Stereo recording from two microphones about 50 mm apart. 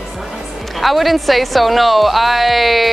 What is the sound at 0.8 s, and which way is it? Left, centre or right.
Speech, centre.